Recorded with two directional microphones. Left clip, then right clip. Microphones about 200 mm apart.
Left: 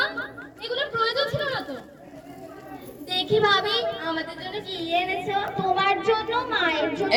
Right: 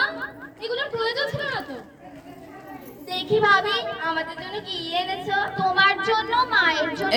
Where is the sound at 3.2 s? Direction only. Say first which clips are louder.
Right 2 dB; 5° left (ahead or behind).